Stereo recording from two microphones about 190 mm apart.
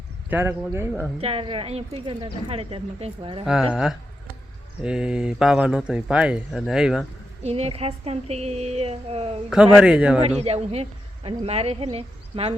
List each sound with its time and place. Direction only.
0.3 s speech: 10° right (ahead or behind)
1.2 s speech: 30° right (ahead or behind)
3.4 s speech: centre (ahead or behind)
7.4 s a woman's voice: 30° right (ahead or behind)
9.5 s speech: 5° right (ahead or behind)
10.2 s a woman's voice: 35° right (ahead or behind)